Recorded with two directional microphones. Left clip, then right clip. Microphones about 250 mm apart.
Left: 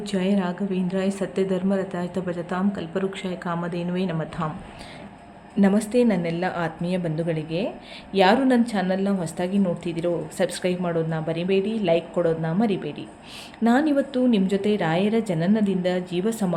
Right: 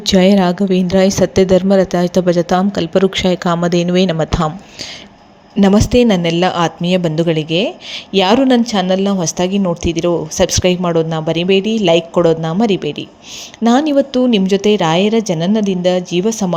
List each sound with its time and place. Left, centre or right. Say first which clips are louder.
0.0 s speech: right 14 dB; right
5.5 s speech: right 10 dB; right